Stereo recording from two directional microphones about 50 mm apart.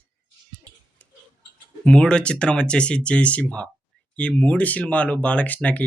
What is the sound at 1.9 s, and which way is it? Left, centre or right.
Speech, left.